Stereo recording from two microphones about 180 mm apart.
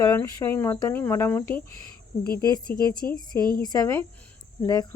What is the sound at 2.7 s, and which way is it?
Speech, 10° left (ahead or behind).